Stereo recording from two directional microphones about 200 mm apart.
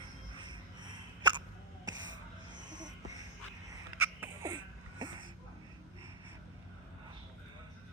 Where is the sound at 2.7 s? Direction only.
20° right (ahead or behind).